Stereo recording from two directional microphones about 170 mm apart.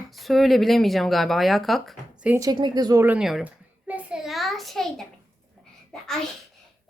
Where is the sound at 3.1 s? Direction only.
5° right (ahead or behind).